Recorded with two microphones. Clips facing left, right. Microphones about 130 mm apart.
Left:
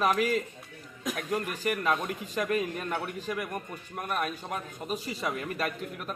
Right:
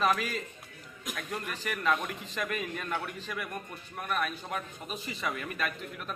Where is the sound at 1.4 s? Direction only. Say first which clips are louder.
Left 6 dB; 45° left (ahead or behind).